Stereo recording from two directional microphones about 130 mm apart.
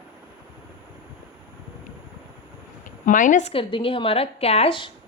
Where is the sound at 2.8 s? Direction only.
90° left; by 3.5 s 75° left (ahead or behind).